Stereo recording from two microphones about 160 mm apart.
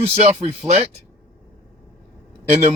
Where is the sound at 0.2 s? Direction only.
45° right (ahead or behind).